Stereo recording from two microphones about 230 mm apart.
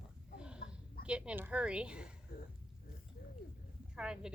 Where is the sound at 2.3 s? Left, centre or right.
Left.